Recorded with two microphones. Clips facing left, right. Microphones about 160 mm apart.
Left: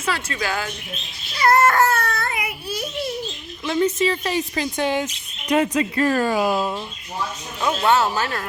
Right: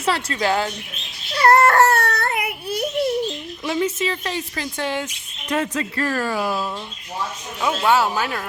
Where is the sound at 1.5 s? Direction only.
65° right (ahead or behind).